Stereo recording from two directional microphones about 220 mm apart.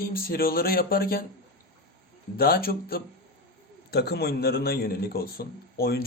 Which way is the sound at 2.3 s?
45° left (ahead or behind).